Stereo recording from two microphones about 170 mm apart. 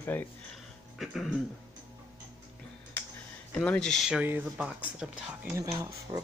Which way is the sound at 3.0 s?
10° left (ahead or behind).